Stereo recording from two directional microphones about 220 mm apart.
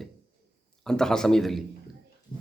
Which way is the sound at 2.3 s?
40° left (ahead or behind).